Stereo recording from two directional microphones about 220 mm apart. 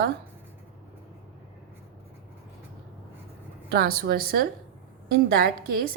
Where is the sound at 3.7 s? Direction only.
45° right (ahead or behind).